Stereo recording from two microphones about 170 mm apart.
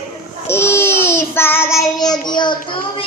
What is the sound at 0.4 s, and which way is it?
Child singing, 15° left (ahead or behind).